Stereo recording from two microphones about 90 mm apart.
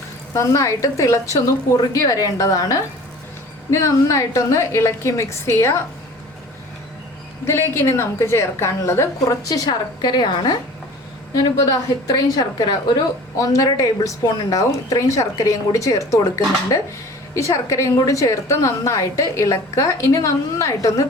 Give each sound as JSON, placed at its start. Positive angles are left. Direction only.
{"t": 0.3, "sound": "a woman's voice", "side_deg": 35}
{"t": 7.4, "sound": "a woman's voice", "side_deg": 30}
{"t": 9.2, "sound": "a woman's voice", "side_deg": 45}
{"t": 11.3, "sound": "a woman's voice", "side_deg": 40}